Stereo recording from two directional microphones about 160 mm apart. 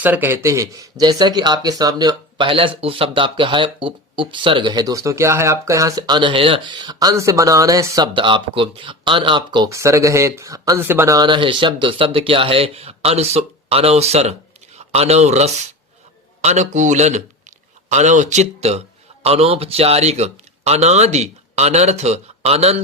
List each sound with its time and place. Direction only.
0.0 s speech: 10° right (ahead or behind); by 9.6 s 30° right (ahead or behind)
9.6 s a man's voice: 20° right (ahead or behind); by 22.8 s 40° right (ahead or behind)